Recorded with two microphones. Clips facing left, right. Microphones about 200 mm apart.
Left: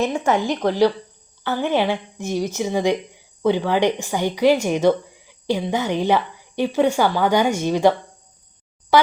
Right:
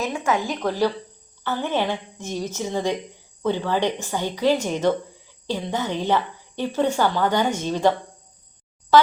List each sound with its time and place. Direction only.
0.0 s a woman's voice: 35° left (ahead or behind)
0.4 s a woman's voice: 70° left (ahead or behind)
1.5 s a woman's voice: 10° left (ahead or behind)